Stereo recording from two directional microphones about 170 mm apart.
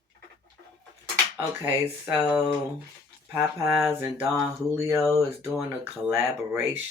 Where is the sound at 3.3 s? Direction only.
15° right (ahead or behind).